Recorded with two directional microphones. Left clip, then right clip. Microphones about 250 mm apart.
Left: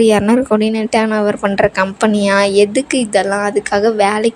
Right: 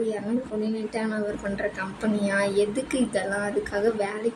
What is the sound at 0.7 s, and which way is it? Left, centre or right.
A woman's voice, left.